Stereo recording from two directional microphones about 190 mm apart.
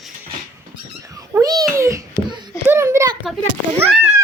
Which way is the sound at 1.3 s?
20° right (ahead or behind).